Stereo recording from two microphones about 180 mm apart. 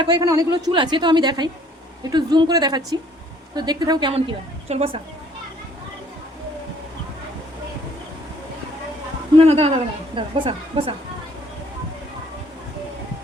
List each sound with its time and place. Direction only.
0.0 s a woman's voice: 20° right (ahead or behind)
9.4 s a woman's voice: 35° right (ahead or behind)